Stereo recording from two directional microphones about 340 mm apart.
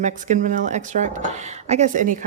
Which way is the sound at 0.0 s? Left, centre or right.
Right.